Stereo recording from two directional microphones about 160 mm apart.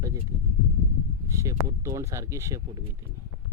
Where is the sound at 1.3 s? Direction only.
20° right (ahead or behind).